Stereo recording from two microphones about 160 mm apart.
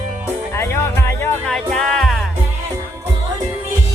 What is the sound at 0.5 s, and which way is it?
Music, 15° left (ahead or behind).